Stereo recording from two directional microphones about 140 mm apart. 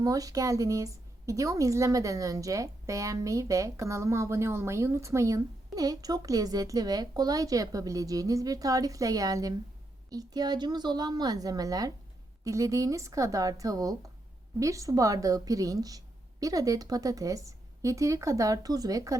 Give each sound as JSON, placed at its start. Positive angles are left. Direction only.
{"t": 0.0, "sound": "a woman's voice", "side_deg": -25}